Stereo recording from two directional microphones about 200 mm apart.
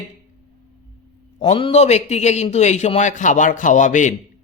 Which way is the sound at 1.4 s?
25° left (ahead or behind).